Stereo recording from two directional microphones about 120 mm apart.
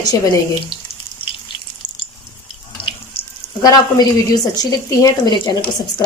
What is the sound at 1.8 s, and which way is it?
Water, 90° left.